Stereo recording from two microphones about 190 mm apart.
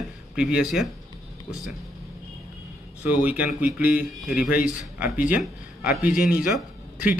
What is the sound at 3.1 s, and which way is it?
A man's voice, 10° right (ahead or behind).